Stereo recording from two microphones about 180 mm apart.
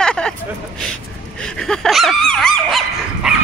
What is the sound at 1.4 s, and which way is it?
Dog, 5° left (ahead or behind).